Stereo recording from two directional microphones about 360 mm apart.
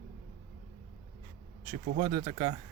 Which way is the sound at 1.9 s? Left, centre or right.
Centre.